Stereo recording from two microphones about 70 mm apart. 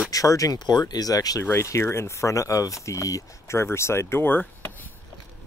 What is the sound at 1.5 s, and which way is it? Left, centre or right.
Speech, left.